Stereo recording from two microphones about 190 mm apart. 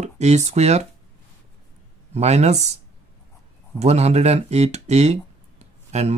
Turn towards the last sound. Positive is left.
turn(degrees=-35)  # may be behind; listen again after turning